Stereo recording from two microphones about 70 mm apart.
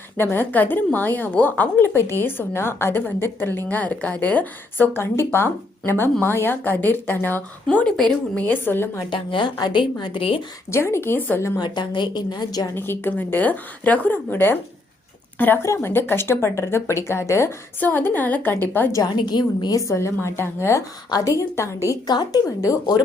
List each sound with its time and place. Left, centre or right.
0.2 s a woman's voice: left
3.7 s a woman's voice: left
4.9 s a woman's voice: left; by 8.4 s centre
8.4 s speech: left
9.6 s a woman's voice: left
10.7 s speech: left
11.6 s a woman's voice: left
12.7 s a woman's voice: left
15.6 s speech: left
17.7 s a woman's voice: left
19.0 s a woman's voice: left
19.8 s a woman's voice: left
21.1 s a woman's voice: left
22.0 s speech: left